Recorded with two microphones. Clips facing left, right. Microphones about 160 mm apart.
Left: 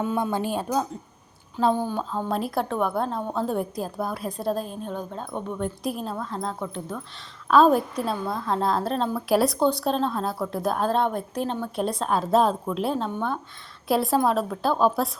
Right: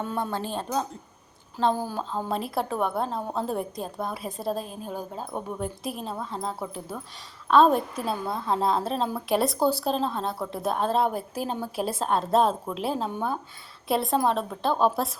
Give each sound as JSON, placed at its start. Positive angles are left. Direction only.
{"t": 0.0, "sound": "speech", "side_deg": 10}
{"t": 1.5, "sound": "a woman's voice", "side_deg": -5}